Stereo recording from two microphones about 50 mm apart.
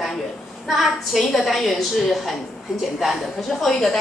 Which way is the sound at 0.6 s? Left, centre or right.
Centre.